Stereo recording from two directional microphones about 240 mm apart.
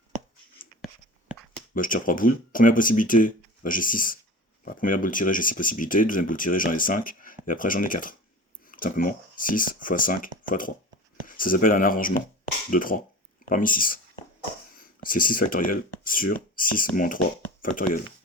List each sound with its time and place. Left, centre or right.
1.7 s speech: left